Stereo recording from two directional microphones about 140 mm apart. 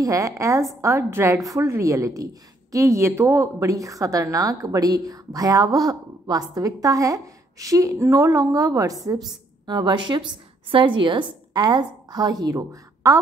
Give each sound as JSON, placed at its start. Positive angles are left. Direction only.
{"t": 0.0, "sound": "a woman's voice", "side_deg": -25}